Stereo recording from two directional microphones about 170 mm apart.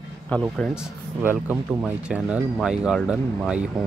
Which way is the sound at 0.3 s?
Centre (ahead or behind).